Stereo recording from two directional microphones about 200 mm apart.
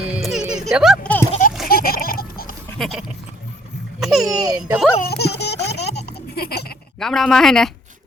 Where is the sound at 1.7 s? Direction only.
50° left (ahead or behind).